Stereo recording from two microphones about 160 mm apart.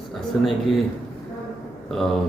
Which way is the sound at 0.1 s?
Centre (ahead or behind).